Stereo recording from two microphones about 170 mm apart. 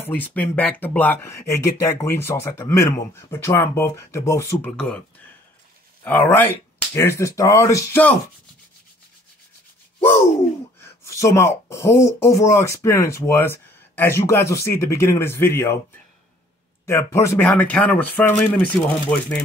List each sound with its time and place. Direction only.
0.0 s speech: 10° left (ahead or behind)
4.6 s speech: 5° left (ahead or behind)
6.0 s speech: 10° left (ahead or behind)
10.8 s speech: 15° left (ahead or behind)
16.8 s speech: 15° left (ahead or behind)